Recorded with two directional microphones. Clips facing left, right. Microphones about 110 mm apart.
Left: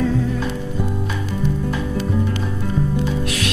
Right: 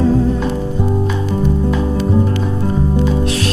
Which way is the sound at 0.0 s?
30° right (ahead or behind).